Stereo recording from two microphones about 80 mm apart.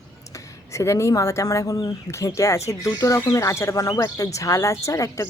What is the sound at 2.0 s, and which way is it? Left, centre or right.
Speech, left.